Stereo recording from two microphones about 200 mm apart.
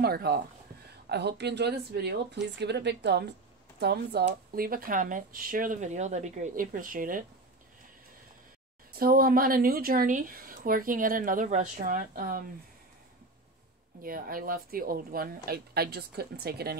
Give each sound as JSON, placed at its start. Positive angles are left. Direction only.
{"t": 0.0, "sound": "speech", "side_deg": -50}
{"t": 8.9, "sound": "speech", "side_deg": -45}
{"t": 14.0, "sound": "speech", "side_deg": -45}